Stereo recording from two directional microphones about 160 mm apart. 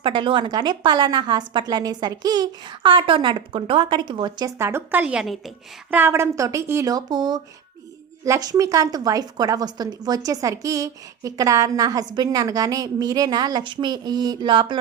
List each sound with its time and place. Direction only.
0.0 s speech: 30° right (ahead or behind); by 5.4 s 5° right (ahead or behind)
5.9 s speech: 15° right (ahead or behind); by 14.8 s 30° right (ahead or behind)